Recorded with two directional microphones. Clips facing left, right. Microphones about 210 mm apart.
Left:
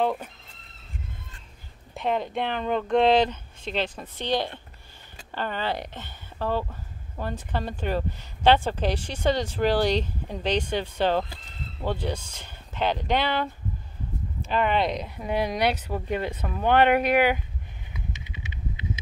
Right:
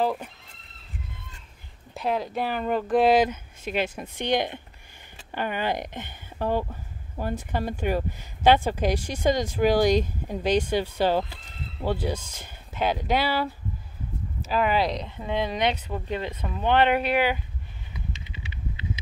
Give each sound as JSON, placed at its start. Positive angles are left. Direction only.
{"t": 0.0, "sound": "speech", "side_deg": 0}
{"t": 2.0, "sound": "speech", "side_deg": 0}
{"t": 15.0, "sound": "speech", "side_deg": 10}
{"t": 18.2, "sound": "a sound", "side_deg": 20}